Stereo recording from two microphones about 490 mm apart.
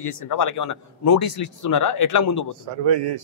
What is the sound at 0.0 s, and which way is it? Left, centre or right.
Speech, left.